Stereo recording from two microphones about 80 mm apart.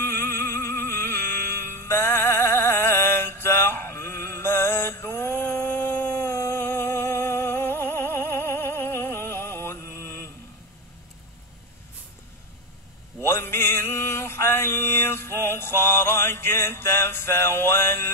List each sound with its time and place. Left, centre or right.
0.0 s music: left
13.2 s mantra: left